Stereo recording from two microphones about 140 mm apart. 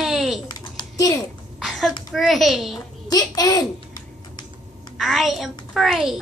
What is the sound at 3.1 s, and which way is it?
Speech, 25° left (ahead or behind).